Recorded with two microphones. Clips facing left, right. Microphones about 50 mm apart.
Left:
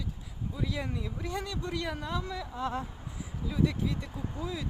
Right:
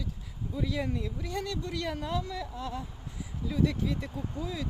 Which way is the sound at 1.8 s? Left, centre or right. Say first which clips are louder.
Right 2 dB; centre.